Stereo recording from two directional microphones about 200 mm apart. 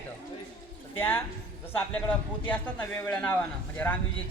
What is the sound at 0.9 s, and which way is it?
Speech, 10° left (ahead or behind).